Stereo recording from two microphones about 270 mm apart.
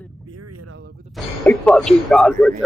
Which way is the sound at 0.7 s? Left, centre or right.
Right.